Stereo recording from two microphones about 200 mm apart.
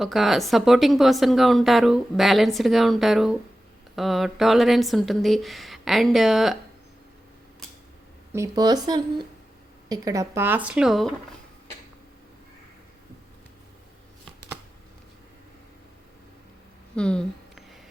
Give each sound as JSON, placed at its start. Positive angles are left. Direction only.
{"t": 0.0, "sound": "speech", "side_deg": 0}
{"t": 8.3, "sound": "speech", "side_deg": -15}
{"t": 16.9, "sound": "a sound", "side_deg": 5}